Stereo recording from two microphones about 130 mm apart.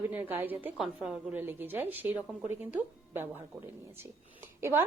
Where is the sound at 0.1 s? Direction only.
15° right (ahead or behind).